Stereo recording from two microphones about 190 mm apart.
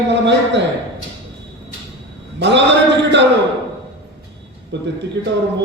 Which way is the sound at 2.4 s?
65° right (ahead or behind).